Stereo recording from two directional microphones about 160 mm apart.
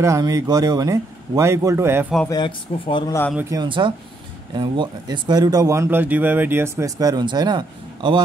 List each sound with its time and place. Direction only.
0.0 s speech: 20° right (ahead or behind)
2.2 s speech: 30° left (ahead or behind)
3.4 s speech: 25° right (ahead or behind)